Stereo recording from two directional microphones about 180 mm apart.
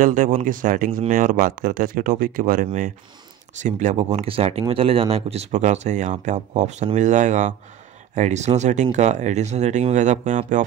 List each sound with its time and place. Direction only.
0.0 s speech: 45° right (ahead or behind)